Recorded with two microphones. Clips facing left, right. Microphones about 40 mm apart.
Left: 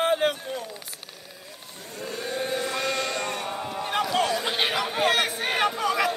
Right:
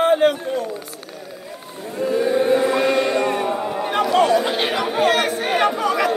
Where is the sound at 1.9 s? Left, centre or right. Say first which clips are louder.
Right 13 dB; centre.